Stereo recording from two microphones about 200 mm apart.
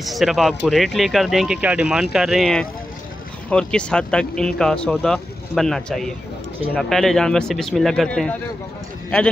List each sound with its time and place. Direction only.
0.0 s speech: centre (ahead or behind)